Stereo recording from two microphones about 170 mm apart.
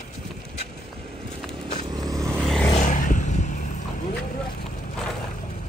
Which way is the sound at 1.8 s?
25° right (ahead or behind).